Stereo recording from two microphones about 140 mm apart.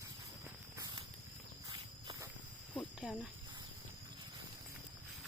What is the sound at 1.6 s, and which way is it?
Walk, 25° right (ahead or behind).